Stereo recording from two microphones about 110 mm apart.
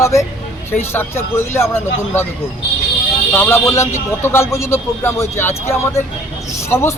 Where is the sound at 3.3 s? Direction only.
20° left (ahead or behind).